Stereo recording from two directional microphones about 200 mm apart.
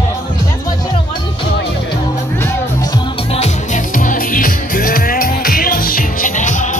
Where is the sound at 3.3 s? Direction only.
35° left (ahead or behind).